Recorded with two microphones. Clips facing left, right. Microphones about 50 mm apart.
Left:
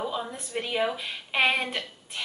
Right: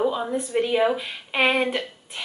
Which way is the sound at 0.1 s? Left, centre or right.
Centre.